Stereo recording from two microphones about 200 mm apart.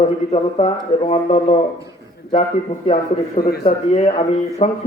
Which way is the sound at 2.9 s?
35° left (ahead or behind).